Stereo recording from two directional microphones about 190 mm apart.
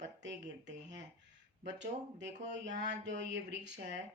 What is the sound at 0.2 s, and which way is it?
Speech, 70° right (ahead or behind).